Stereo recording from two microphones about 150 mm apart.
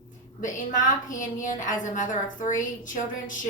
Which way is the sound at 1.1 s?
60° left (ahead or behind).